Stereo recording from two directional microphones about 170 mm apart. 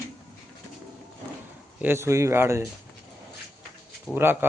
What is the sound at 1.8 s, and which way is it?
Speech, 15° right (ahead or behind).